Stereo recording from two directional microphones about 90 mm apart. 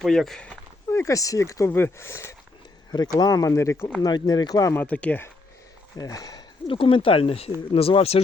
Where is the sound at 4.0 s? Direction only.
50° left (ahead or behind).